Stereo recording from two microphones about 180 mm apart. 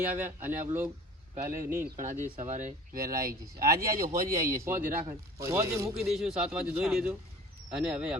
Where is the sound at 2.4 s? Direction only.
45° right (ahead or behind).